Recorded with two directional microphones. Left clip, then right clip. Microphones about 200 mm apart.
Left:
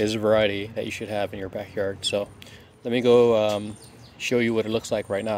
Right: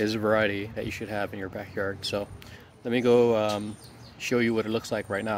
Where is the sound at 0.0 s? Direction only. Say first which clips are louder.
Left 4 dB; 20° left (ahead or behind).